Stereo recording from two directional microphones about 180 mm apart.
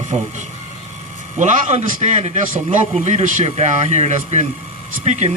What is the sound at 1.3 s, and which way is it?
A man's voice, 40° right (ahead or behind).